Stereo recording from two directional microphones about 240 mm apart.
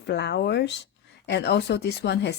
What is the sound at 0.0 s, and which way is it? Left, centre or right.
Speech, left.